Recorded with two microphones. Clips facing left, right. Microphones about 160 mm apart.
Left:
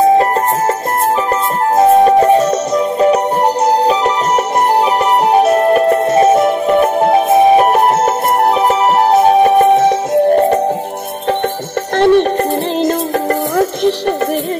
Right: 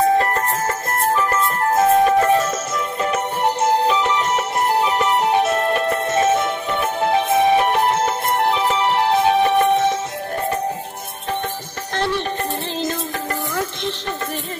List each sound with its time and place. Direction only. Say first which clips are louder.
1.8 s music: left 7 dB; 35° left (ahead or behind)
12.0 s music: left 13 dB; 55° left (ahead or behind)